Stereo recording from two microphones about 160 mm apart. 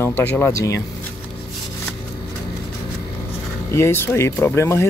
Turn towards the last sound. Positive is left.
turn(degrees=15)  # may be behind; listen again after turning